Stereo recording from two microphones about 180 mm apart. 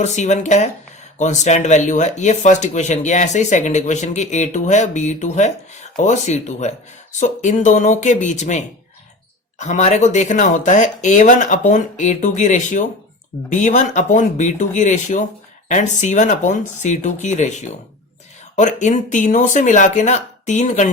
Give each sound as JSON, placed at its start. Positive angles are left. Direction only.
{"t": 0.0, "sound": "speech", "side_deg": 40}